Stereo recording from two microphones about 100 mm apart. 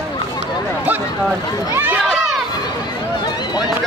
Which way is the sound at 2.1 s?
Centre (ahead or behind).